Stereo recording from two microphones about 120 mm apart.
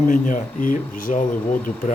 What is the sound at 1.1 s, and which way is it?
Speech, 75° left (ahead or behind).